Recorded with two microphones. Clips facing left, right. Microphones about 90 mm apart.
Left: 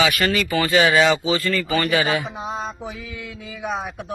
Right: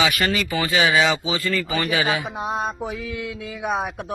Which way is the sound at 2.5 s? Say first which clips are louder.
Right 3 dB; 55° right (ahead or behind).